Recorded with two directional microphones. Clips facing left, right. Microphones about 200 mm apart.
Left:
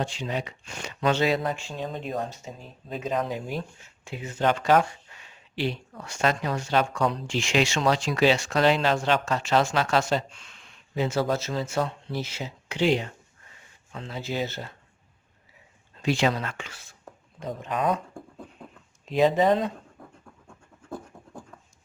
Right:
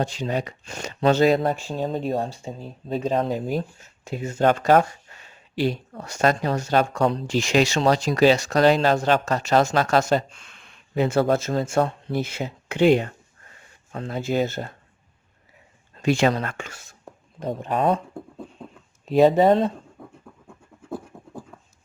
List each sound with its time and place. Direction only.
0.0 s speech: 40° right (ahead or behind)
16.0 s speech: 50° right (ahead or behind)
17.5 s speech: 30° right (ahead or behind)
18.1 s a sound: centre (ahead or behind)
19.4 s speech: 35° right (ahead or behind)
20.0 s scratch: centre (ahead or behind)